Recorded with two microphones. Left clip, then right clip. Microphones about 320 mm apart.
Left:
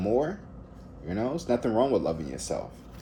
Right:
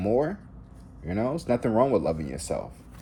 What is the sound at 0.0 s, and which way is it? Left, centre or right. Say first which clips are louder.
Speech: right 2 dB; right.